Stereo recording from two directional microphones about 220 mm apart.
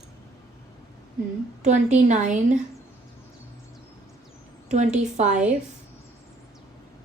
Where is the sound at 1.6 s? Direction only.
35° right (ahead or behind).